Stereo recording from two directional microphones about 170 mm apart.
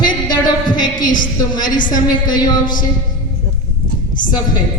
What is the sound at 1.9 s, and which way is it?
Speech, 25° left (ahead or behind).